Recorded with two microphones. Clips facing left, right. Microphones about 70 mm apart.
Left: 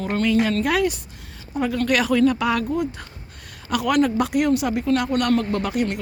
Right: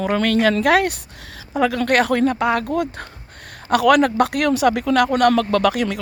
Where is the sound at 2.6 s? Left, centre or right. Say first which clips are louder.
Right 2 dB; right.